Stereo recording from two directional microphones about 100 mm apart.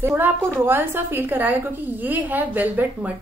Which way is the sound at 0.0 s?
25° right (ahead or behind).